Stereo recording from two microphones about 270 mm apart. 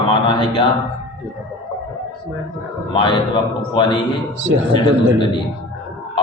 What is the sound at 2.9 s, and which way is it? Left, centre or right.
A man's voice, centre.